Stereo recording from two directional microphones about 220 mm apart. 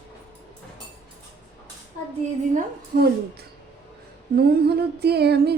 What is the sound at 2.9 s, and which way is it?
Speech, 45° right (ahead or behind).